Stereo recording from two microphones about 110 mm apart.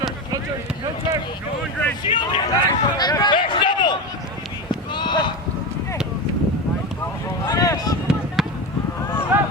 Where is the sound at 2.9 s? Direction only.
40° left (ahead or behind).